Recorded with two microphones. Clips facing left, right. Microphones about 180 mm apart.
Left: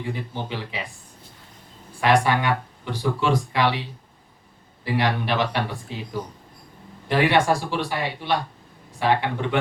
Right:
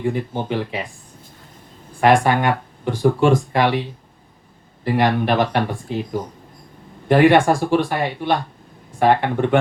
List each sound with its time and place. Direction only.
0.0 s speech: 50° right (ahead or behind)
2.0 s speech: 50° right (ahead or behind)
4.9 s speech: 50° right (ahead or behind)
7.1 s speech: 50° right (ahead or behind)